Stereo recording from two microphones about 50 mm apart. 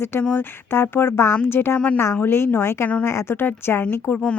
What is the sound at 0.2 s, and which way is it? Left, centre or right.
Speech, left.